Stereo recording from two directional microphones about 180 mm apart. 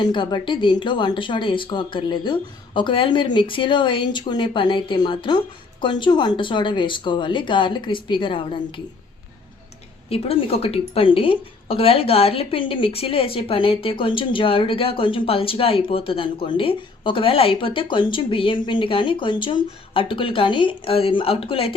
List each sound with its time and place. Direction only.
0.0 s a woman's voice: 25° left (ahead or behind)
10.1 s a woman's voice: 35° left (ahead or behind)